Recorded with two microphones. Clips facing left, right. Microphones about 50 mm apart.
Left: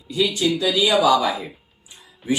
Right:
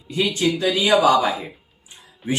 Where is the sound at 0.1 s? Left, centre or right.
Right.